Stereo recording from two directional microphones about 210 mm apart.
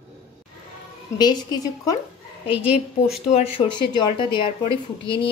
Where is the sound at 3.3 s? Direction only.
25° left (ahead or behind).